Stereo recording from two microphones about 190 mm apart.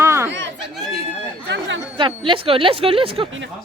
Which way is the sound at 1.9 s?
25° right (ahead or behind).